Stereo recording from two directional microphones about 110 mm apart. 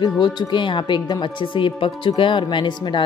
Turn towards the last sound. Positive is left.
turn(degrees=45)  # may be behind; listen again after turning